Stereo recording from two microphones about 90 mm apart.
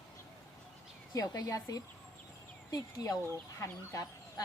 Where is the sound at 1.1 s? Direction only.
40° left (ahead or behind).